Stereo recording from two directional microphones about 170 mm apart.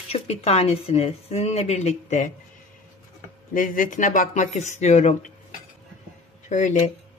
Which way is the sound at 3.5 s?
55° left (ahead or behind).